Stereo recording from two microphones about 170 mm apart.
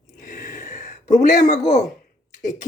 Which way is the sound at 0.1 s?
45° left (ahead or behind).